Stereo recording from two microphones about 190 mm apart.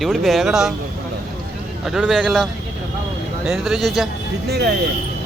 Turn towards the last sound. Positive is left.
turn(degrees=-60)  # may be behind; listen again after turning